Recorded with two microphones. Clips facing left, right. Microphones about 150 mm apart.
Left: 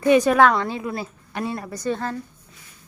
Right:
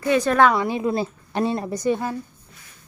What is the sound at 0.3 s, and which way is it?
Speech, 5° right (ahead or behind).